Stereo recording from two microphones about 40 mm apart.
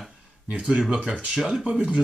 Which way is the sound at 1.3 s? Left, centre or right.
Centre.